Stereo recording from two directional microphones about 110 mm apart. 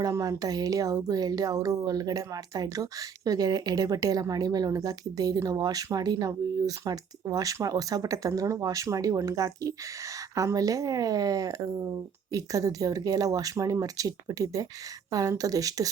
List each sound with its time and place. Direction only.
0.0 s speech: 30° right (ahead or behind)